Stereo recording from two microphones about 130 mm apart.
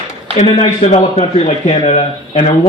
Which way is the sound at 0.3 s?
60° left (ahead or behind).